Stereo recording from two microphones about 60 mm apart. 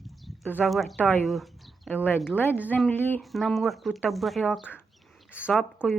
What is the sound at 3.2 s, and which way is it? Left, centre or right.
Speech, centre.